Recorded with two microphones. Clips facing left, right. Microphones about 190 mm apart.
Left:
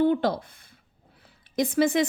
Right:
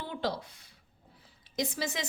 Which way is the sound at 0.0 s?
55° left (ahead or behind).